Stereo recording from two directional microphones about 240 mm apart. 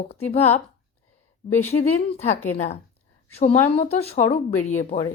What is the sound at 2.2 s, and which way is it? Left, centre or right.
Speech, left.